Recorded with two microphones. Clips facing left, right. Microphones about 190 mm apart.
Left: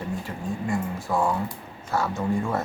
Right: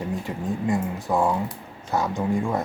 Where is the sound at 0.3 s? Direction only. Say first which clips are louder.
Right 5 dB; 20° right (ahead or behind).